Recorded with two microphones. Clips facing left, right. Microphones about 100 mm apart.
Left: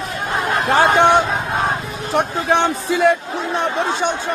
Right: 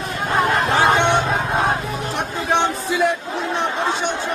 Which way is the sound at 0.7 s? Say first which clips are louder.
Left 6 dB; 45° left (ahead or behind).